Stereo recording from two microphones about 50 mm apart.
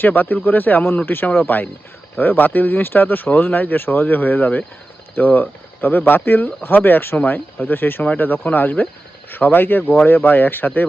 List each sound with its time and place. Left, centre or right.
0.0 s speech: left
8.0 s speech: left